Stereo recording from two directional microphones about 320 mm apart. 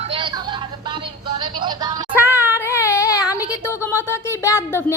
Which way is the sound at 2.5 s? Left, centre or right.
Centre.